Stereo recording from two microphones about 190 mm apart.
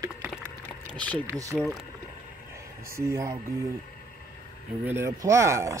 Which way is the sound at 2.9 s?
15° right (ahead or behind).